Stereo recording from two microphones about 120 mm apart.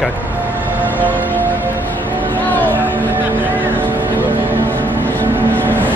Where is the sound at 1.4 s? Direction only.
15° right (ahead or behind).